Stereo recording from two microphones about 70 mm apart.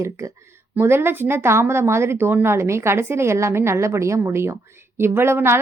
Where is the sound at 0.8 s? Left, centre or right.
Right.